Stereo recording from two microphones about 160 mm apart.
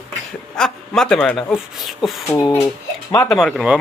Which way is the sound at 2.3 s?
15° left (ahead or behind).